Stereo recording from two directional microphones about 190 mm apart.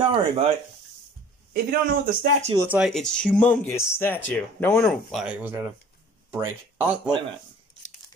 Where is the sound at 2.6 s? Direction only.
5° right (ahead or behind); by 4.9 s 10° left (ahead or behind).